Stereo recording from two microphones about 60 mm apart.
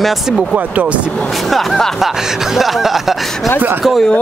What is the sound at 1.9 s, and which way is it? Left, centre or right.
Speech, centre.